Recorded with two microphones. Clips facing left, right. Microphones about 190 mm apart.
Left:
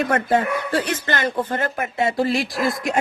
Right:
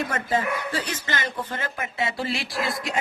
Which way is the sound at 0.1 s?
60° left (ahead or behind).